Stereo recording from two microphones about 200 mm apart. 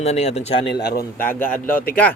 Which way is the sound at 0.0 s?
35° left (ahead or behind).